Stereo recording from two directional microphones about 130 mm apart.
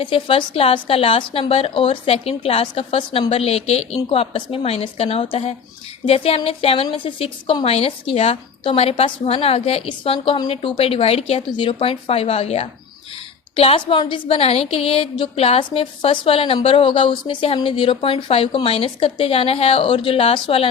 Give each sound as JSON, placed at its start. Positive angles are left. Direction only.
{"t": 0.0, "sound": "a woman's voice", "side_deg": 40}